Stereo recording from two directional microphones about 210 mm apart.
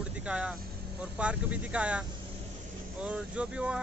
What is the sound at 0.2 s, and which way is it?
Speech, 5° right (ahead or behind).